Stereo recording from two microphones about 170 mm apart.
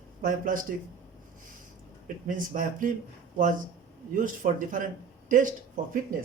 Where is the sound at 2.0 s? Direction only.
50° right (ahead or behind).